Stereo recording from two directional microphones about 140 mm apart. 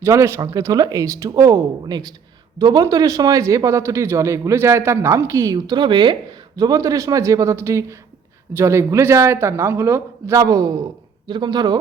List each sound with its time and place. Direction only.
0.0 s a man's voice: 20° right (ahead or behind)